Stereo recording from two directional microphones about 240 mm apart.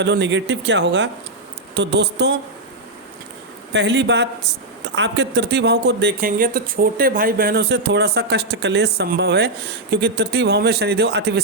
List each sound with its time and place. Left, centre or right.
0.0 s speech: right
3.7 s speech: right